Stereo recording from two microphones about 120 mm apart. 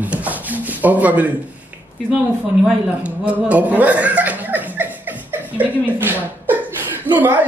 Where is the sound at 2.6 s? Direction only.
10° right (ahead or behind).